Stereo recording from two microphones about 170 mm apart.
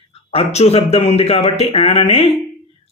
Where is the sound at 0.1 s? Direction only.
35° left (ahead or behind).